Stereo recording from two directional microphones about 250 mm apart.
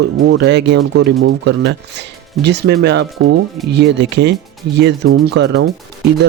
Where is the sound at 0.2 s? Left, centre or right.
Right.